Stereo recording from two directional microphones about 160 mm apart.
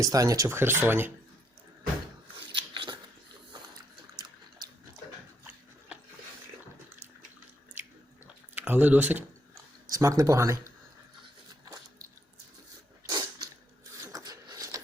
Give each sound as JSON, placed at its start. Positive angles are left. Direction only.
{"t": 0.0, "sound": "speech", "side_deg": -20}
{"t": 2.5, "sound": "scissors", "side_deg": -30}
{"t": 8.5, "sound": "speech", "side_deg": -10}
{"t": 9.9, "sound": "speech", "side_deg": -20}
{"t": 13.1, "sound": "a sound", "side_deg": -25}
{"t": 14.0, "sound": "printer", "side_deg": -20}